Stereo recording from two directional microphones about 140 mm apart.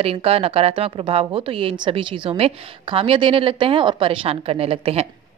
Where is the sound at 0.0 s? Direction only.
45° right (ahead or behind).